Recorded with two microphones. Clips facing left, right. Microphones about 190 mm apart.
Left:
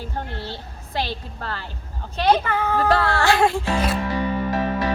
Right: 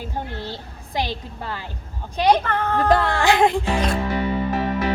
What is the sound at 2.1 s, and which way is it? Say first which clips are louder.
Speech: right 1 dB; 15° right (ahead or behind).